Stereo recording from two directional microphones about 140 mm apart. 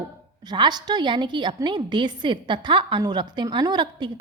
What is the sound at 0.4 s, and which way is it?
A woman's voice, 30° right (ahead or behind).